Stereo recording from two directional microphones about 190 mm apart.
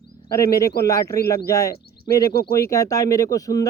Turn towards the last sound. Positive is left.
turn(degrees=20)  # may be behind; listen again after turning